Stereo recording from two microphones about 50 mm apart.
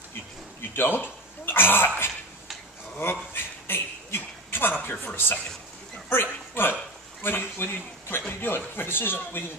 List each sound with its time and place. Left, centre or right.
0.6 s speech: left
3.3 s a sound: left
5.0 s speech: left